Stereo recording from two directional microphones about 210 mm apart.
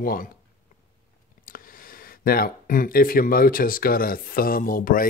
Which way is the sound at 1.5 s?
40° left (ahead or behind).